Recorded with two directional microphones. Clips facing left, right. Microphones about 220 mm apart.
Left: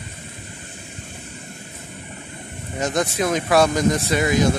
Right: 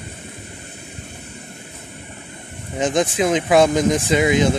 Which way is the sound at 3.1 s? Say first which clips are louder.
Right 2 dB; 20° right (ahead or behind).